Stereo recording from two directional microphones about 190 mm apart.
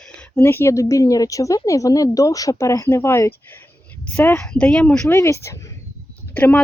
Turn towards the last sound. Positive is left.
turn(degrees=10)  # may be behind; listen again after turning